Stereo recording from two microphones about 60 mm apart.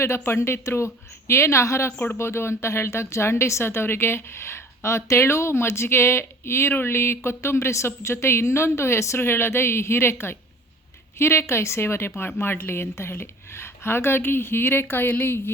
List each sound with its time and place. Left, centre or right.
0.0 s speech: left